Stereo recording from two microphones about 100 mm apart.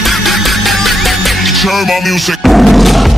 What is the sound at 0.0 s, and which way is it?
Music, centre (ahead or behind).